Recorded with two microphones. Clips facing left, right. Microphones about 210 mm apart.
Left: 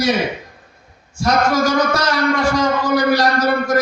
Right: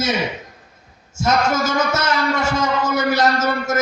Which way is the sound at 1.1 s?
25° right (ahead or behind).